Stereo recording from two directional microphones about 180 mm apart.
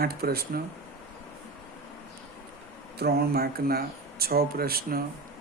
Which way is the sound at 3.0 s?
60° right (ahead or behind).